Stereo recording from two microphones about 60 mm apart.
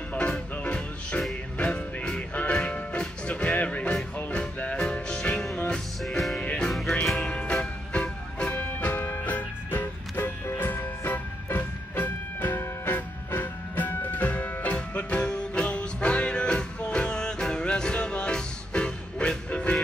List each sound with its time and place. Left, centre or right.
0.3 s music: centre
5.7 s music: centre
6.4 s music: left
6.7 s music: centre
7.2 s music: centre
8.5 s music: left